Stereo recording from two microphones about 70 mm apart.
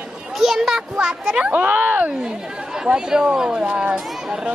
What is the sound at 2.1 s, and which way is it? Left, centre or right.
Speech, centre.